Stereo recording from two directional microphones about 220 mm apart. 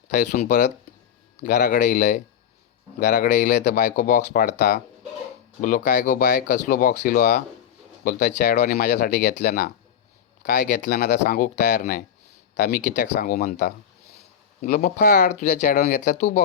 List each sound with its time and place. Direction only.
0.1 s speech: 35° left (ahead or behind)